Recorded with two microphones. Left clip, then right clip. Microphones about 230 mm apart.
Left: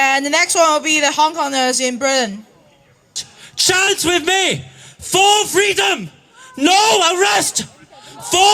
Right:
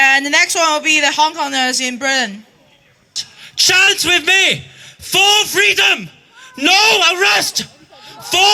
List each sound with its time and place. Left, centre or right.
0.0 s a man's voice: left